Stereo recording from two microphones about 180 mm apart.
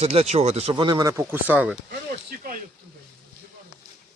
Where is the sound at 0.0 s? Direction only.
35° right (ahead or behind); by 1.8 s 5° right (ahead or behind).